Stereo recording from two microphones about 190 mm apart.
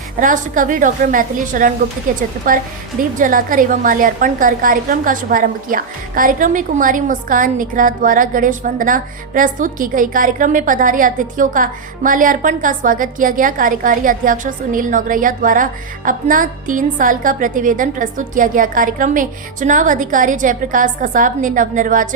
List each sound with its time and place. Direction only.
0.2 s a woman's voice: 45° right (ahead or behind)